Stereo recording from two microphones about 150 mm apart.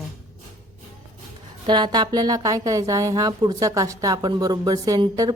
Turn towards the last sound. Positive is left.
turn(degrees=-25)  # may be behind; listen again after turning